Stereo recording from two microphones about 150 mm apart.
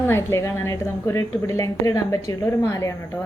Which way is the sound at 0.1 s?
15° left (ahead or behind).